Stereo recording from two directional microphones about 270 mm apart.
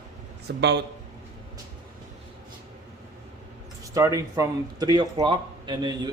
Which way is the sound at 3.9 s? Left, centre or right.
Centre.